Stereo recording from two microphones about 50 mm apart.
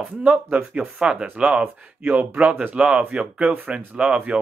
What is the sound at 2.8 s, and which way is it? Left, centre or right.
Speech, right.